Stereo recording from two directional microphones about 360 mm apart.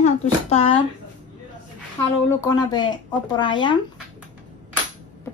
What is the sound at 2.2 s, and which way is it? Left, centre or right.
Speech, centre.